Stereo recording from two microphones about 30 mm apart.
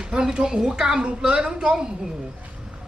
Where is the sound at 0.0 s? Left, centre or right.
Right.